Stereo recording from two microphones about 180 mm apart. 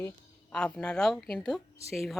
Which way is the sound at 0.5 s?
5° left (ahead or behind).